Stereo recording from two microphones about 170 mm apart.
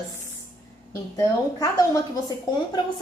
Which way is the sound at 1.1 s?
20° left (ahead or behind).